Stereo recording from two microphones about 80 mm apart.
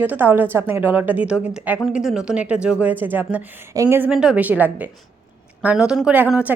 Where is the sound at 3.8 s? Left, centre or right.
Right.